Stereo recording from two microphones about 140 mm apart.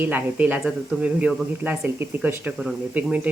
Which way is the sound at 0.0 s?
10° right (ahead or behind).